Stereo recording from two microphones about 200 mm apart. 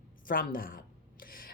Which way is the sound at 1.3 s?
45° left (ahead or behind).